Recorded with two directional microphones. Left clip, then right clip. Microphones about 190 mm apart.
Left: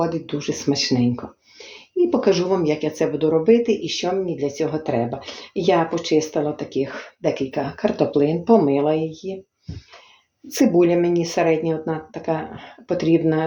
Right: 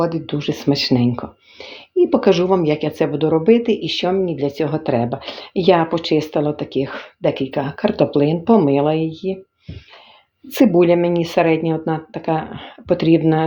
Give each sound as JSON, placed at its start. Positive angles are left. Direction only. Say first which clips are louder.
{"t": 0.0, "sound": "a woman's voice", "louder": "right 3 dB", "side_deg": -40}
{"t": 10.5, "sound": "a woman's voice", "louder": "right 3 dB", "side_deg": -45}